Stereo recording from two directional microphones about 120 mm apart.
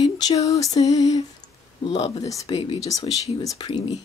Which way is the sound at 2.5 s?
45° left (ahead or behind).